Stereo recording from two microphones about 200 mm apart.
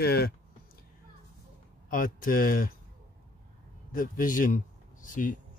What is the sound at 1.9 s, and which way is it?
Speech, 40° left (ahead or behind).